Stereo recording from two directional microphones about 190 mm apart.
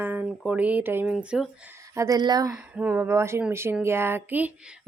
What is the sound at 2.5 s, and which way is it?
A woman's voice, 10° right (ahead or behind).